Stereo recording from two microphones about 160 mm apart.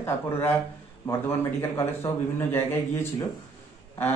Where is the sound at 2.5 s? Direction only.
15° left (ahead or behind).